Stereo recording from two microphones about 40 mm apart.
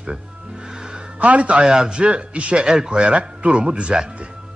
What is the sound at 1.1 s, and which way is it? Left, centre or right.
Speech, right.